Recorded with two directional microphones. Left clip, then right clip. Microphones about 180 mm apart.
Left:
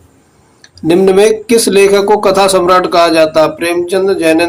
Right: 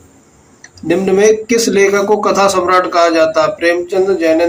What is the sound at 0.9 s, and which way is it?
Speech, 45° left (ahead or behind).